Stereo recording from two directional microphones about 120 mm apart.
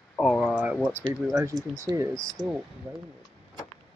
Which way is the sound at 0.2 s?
5° right (ahead or behind).